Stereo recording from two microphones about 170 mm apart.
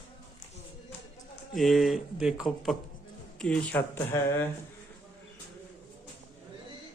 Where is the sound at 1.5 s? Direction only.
Centre (ahead or behind).